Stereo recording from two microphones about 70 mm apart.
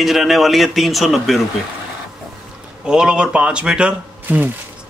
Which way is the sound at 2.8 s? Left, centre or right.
Centre.